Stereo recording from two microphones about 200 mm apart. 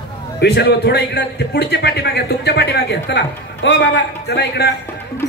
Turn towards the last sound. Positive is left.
turn(degrees=55)  # may be behind; listen again after turning